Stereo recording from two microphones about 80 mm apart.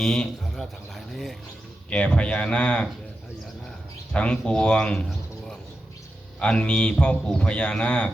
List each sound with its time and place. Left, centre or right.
0.0 s speech: centre
1.9 s speech: centre
4.1 s speech: centre
6.4 s speech: centre